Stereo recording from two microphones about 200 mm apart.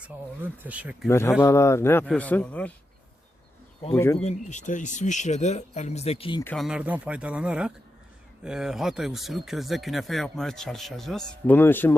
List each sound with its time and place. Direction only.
0.0 s speech: 10° right (ahead or behind)
1.0 s a man's voice: 10° left (ahead or behind)
3.9 s a man's voice: 10° left (ahead or behind)
4.2 s speech: 35° left (ahead or behind)
6.4 s a man's voice: 5° left (ahead or behind)
6.7 s speech: 5° right (ahead or behind); by 11.9 s 10° left (ahead or behind)